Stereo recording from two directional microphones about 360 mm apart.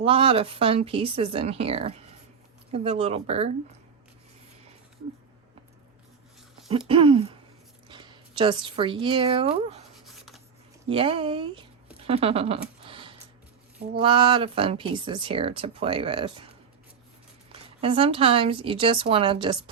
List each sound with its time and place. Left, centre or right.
0.0 s speech: centre
6.7 s a woman's voice: centre
10.1 s writing: centre
10.8 s a sound: centre
14.0 s speech: centre
17.5 s speech: centre